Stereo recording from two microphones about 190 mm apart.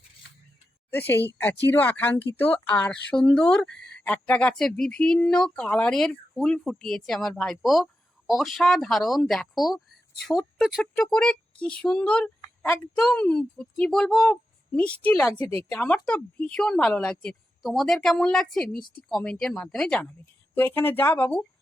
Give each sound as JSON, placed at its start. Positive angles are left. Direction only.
{"t": 0.9, "sound": "a woman's voice", "side_deg": 10}
{"t": 12.4, "sound": "a sound", "side_deg": 10}
{"t": 13.0, "sound": "a woman's voice", "side_deg": 5}